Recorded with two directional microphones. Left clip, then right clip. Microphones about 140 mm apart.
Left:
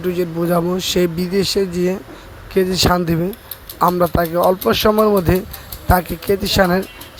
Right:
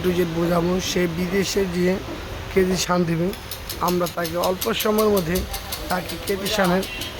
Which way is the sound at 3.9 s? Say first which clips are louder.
Left 7 dB; 25° left (ahead or behind).